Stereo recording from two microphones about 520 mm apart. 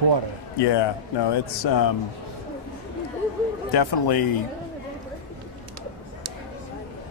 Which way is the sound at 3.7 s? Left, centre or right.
Left.